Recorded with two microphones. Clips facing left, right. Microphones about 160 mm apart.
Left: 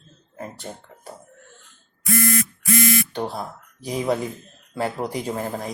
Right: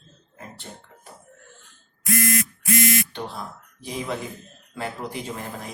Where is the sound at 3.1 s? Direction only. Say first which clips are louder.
Left 5 dB; 40° left (ahead or behind).